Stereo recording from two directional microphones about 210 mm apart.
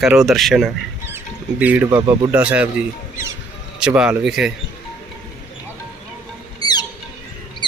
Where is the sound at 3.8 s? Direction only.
5° right (ahead or behind).